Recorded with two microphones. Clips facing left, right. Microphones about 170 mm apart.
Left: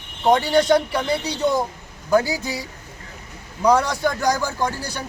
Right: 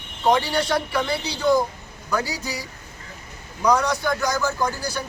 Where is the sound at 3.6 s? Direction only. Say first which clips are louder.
Left 2 dB; 30° left (ahead or behind).